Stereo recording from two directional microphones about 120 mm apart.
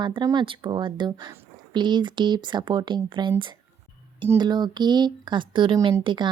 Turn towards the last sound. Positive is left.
turn(degrees=-40)  # may be behind; listen again after turning